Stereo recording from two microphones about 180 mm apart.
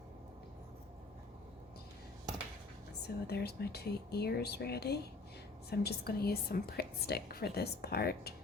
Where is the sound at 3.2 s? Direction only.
65° left (ahead or behind).